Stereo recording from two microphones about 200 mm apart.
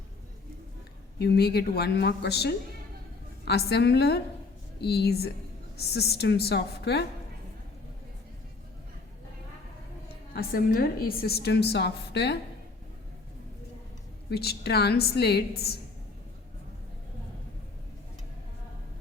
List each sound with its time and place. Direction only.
1.2 s a woman's voice: 55° left (ahead or behind)
10.1 s a woman's voice: 50° left (ahead or behind)
14.3 s a woman's voice: 55° left (ahead or behind)